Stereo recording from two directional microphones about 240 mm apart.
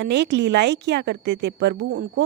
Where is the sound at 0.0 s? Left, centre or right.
Right.